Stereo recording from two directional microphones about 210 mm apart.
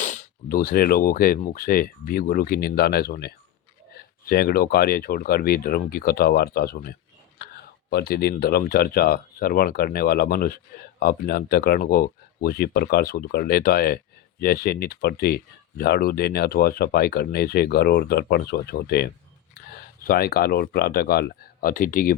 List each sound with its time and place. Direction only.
0.0 s speech: 35° left (ahead or behind)